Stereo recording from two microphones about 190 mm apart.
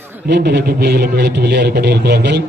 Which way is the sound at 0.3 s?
60° right (ahead or behind).